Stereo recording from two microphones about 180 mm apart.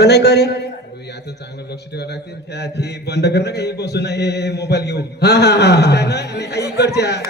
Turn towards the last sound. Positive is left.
turn(degrees=65)  # may be behind; listen again after turning